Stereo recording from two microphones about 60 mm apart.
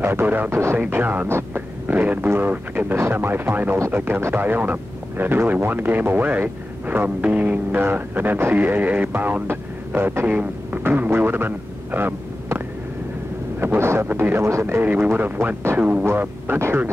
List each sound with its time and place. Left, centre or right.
0.0 s speech: right
0.5 s speech: right
0.7 s speech: right
9.5 s speech: right
10.2 s speech: right
10.8 s speech: right
13.6 s speech: right
14.8 s speech: right
16.5 s speech: right